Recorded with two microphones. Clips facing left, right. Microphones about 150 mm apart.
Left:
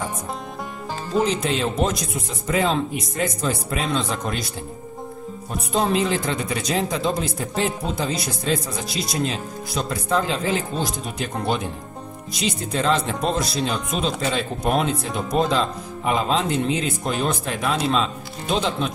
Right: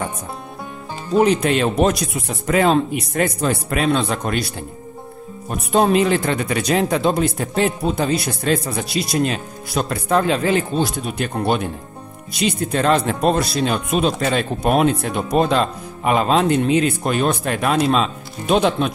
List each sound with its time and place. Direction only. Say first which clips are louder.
1.2 s speech: right 8 dB; 60° right (ahead or behind)
5.7 s speech: right 6 dB; 60° right (ahead or behind)